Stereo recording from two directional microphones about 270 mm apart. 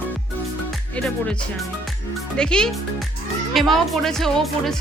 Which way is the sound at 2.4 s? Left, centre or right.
Centre.